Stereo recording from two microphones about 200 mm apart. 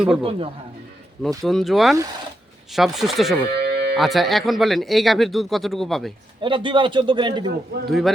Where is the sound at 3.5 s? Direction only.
55° right (ahead or behind).